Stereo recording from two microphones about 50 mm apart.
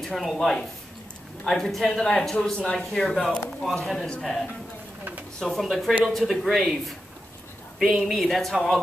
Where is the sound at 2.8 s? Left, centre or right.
Centre.